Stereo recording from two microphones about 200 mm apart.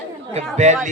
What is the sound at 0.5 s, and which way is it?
Speech, 35° right (ahead or behind).